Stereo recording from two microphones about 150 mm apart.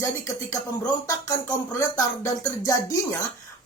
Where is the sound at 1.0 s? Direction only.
25° left (ahead or behind).